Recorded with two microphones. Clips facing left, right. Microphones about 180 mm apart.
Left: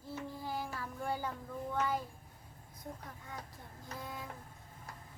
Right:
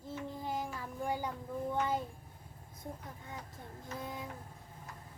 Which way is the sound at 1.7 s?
25° right (ahead or behind).